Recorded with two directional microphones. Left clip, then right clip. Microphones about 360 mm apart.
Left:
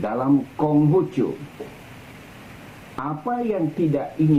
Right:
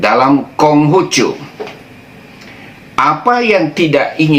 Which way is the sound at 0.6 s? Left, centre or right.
Centre.